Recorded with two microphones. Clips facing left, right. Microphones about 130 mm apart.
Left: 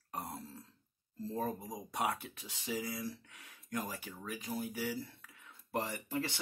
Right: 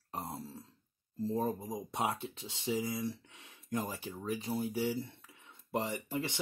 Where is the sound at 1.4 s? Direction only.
25° right (ahead or behind).